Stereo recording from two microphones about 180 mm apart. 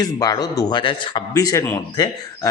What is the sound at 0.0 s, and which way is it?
Speech, 20° left (ahead or behind).